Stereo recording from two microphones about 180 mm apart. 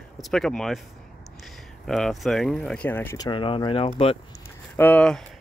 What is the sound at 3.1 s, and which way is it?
Speech, 25° left (ahead or behind).